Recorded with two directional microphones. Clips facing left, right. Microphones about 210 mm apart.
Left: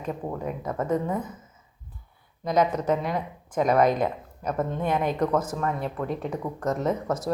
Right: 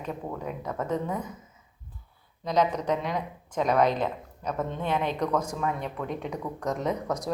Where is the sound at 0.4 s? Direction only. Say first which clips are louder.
Left 4 dB; 10° left (ahead or behind).